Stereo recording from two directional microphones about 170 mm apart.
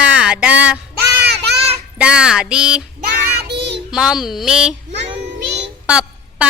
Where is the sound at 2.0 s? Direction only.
5° right (ahead or behind).